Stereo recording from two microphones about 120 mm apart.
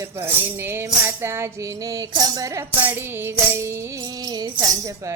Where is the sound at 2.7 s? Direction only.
15° right (ahead or behind).